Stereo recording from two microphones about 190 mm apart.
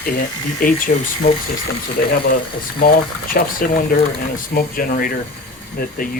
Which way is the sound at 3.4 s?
55° left (ahead or behind).